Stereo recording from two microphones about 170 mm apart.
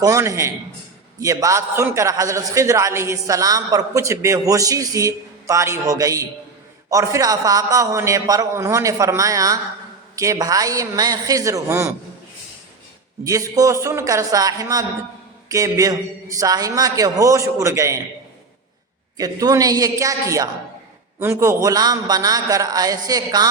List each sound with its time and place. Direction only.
0.0 s a man's voice: 20° right (ahead or behind)
13.2 s a man's voice: 20° right (ahead or behind)
19.1 s a man's voice: 20° right (ahead or behind)